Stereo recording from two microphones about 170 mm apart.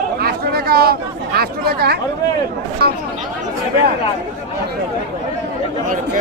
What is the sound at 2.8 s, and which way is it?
Speech, 70° right (ahead or behind).